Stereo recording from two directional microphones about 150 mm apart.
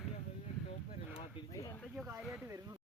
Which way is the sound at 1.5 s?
25° left (ahead or behind).